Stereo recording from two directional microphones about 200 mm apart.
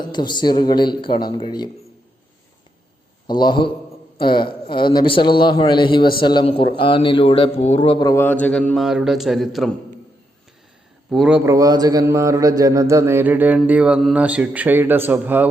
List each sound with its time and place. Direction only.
0.0 s a man's voice: 20° left (ahead or behind)
3.2 s a man's voice: 20° left (ahead or behind); by 9.7 s centre (ahead or behind)
11.1 s a man's voice: 5° right (ahead or behind)